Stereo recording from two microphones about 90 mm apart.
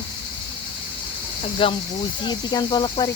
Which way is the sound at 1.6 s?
90° left.